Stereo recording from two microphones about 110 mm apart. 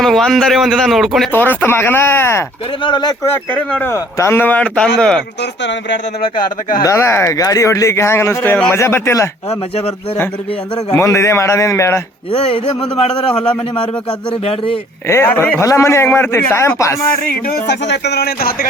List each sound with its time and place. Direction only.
0.0 s a man's voice: 5° left (ahead or behind)
1.3 s a man's voice: 20° left (ahead or behind)
2.8 s speech: 40° left (ahead or behind)
3.5 s a man's voice: 15° left (ahead or behind)
6.8 s a man's voice: 25° left (ahead or behind)
9.5 s speech: 65° left (ahead or behind)
10.9 s a man's voice: 25° left (ahead or behind)
12.3 s a man's voice: 60° left (ahead or behind)
15.0 s a man's voice: 25° left (ahead or behind)